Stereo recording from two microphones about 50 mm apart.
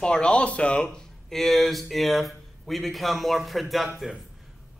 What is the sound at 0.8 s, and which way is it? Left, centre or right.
A man's voice, centre.